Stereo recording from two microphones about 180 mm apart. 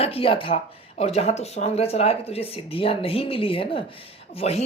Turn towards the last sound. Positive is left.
turn(degrees=35)  # may be behind; listen again after turning